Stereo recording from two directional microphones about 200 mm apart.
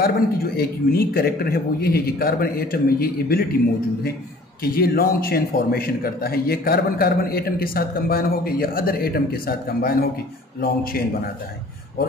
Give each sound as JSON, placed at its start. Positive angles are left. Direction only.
{"t": 0.0, "sound": "a man's voice", "side_deg": 50}
{"t": 4.6, "sound": "a man's voice", "side_deg": 50}